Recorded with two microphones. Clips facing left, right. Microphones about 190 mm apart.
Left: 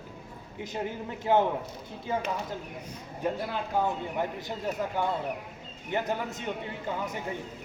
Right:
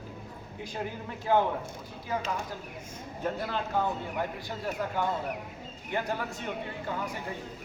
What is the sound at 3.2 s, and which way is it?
A man's voice, 10° left (ahead or behind).